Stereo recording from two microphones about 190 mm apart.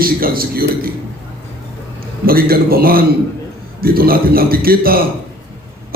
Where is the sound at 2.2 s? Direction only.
50° right (ahead or behind).